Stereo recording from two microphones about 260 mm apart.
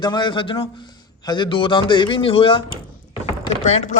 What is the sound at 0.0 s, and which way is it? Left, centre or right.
A man's voice, centre.